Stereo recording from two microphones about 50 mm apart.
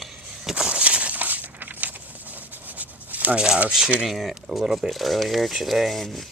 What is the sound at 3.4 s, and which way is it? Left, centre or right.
Speech, right.